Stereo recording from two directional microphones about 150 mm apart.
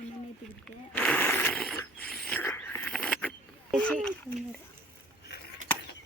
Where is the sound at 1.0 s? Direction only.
10° left (ahead or behind).